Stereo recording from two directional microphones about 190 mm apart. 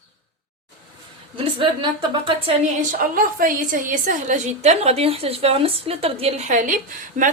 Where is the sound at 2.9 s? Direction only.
45° right (ahead or behind).